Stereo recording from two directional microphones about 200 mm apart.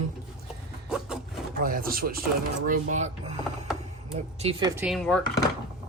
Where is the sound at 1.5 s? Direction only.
45° right (ahead or behind).